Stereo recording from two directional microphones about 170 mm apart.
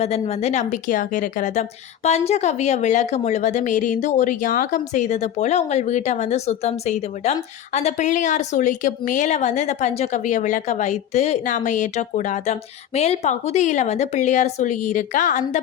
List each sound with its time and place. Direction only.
0.0 s a woman's voice: 40° left (ahead or behind)